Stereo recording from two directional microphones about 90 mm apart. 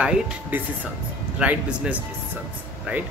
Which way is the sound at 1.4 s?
15° right (ahead or behind).